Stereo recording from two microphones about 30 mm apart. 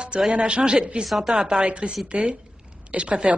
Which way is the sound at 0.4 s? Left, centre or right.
Right.